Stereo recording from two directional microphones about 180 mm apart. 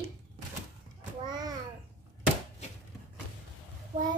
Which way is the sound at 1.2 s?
25° right (ahead or behind).